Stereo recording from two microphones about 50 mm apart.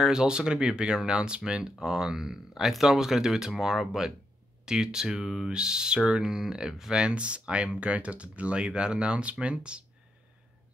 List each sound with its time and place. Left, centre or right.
0.0 s speech: centre